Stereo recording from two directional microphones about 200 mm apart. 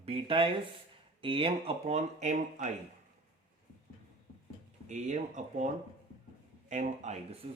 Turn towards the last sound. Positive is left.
turn(degrees=-35)  # may be behind; listen again after turning